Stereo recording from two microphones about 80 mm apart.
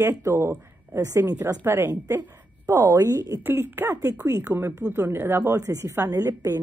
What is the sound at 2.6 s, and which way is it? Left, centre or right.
Speech, right.